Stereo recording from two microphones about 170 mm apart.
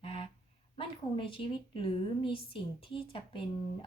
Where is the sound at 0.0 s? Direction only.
35° left (ahead or behind).